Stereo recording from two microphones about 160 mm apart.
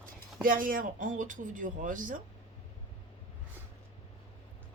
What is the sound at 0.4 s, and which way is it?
Speech, 60° right (ahead or behind).